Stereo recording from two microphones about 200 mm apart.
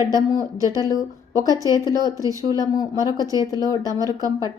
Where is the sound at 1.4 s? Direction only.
15° right (ahead or behind).